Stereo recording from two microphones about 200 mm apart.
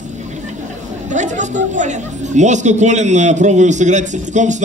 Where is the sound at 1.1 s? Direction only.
40° right (ahead or behind).